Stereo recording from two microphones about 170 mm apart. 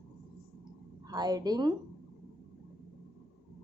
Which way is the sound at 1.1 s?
20° right (ahead or behind).